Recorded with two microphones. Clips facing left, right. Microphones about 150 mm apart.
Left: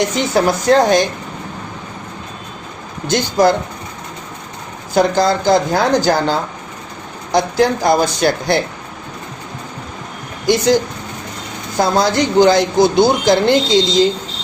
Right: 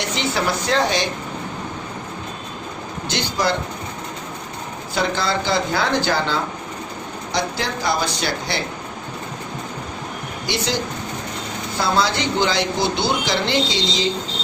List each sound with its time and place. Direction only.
0.0 s speech: 45° left (ahead or behind)
3.1 s speech: 45° left (ahead or behind)
4.9 s speech: 45° left (ahead or behind)
7.3 s speech: 50° left (ahead or behind)
10.4 s speech: 50° left (ahead or behind)
11.8 s speech: 45° left (ahead or behind)